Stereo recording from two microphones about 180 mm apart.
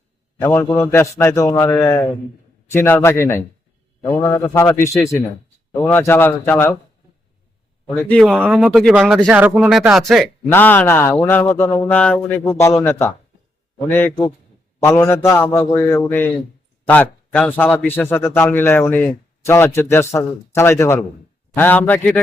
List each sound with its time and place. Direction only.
0.3 s a man's voice: 15° left (ahead or behind)
8.1 s speech: centre (ahead or behind)
10.5 s a man's voice: 10° left (ahead or behind)